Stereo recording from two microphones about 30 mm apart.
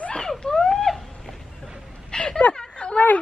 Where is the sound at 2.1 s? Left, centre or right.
Left.